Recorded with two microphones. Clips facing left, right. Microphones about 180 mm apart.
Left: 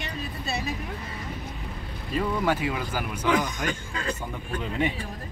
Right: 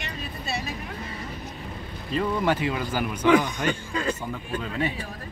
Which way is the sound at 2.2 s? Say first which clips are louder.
Right 1 dB; 5° left (ahead or behind).